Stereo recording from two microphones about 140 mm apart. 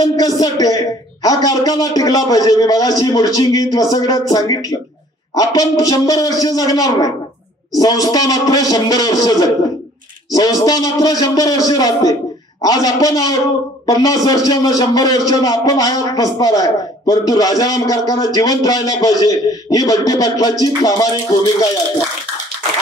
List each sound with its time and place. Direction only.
0.0 s a man's voice: 25° left (ahead or behind)